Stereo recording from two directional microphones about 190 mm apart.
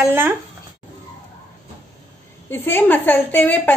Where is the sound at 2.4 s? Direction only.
10° left (ahead or behind).